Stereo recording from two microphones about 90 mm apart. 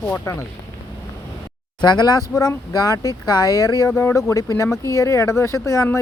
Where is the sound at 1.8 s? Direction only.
55° left (ahead or behind).